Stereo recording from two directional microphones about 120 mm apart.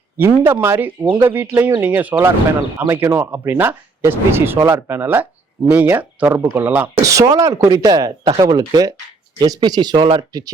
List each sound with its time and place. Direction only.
0.2 s speech: 20° right (ahead or behind)
7.0 s speech: 25° right (ahead or behind)